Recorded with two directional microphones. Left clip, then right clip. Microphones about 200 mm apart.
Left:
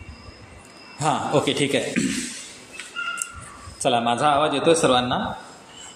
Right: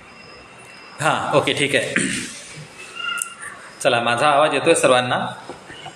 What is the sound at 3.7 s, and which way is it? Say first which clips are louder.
A man's voice: right 3 dB; 40° left (ahead or behind).